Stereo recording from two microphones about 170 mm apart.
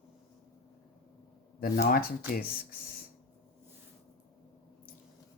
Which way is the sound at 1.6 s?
60° left (ahead or behind).